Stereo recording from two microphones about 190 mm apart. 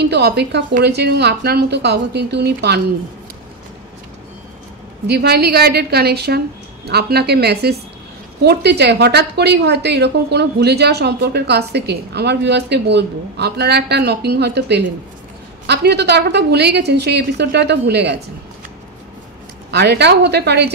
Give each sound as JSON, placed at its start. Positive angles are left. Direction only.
{"t": 0.0, "sound": "a woman's voice", "side_deg": -60}
{"t": 5.0, "sound": "a woman's voice", "side_deg": -60}
{"t": 19.7, "sound": "a woman's voice", "side_deg": -60}